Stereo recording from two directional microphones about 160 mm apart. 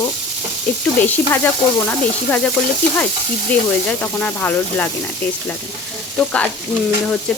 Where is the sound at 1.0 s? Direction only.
10° left (ahead or behind).